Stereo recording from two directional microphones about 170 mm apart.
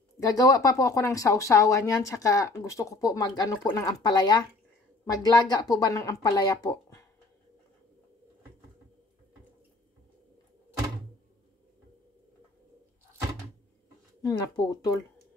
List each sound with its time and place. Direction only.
0.2 s speech: 20° left (ahead or behind)
14.2 s speech: 25° left (ahead or behind)